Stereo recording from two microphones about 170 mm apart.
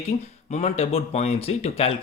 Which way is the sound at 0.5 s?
40° left (ahead or behind).